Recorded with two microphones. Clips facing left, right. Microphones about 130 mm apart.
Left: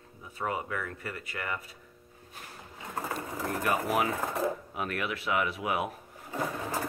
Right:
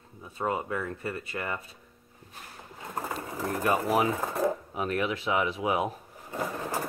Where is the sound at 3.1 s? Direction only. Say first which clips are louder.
Right 2 dB; 35° right (ahead or behind).